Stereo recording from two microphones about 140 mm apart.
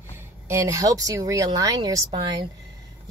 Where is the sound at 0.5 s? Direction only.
20° right (ahead or behind).